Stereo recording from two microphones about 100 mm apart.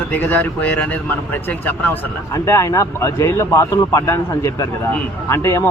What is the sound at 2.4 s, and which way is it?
A man's voice, 30° left (ahead or behind).